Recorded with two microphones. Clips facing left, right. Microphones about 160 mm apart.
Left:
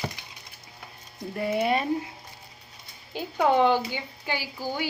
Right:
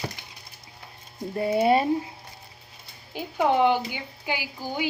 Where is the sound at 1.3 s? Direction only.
25° right (ahead or behind).